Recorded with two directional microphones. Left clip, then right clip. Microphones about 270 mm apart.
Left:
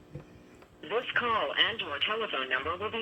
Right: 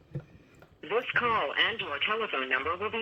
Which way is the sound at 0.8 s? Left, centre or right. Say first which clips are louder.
Right 2 dB; centre.